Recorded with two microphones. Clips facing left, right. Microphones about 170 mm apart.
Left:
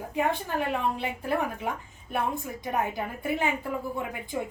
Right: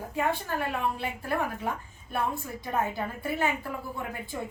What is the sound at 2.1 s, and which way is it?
A woman's voice, 15° left (ahead or behind).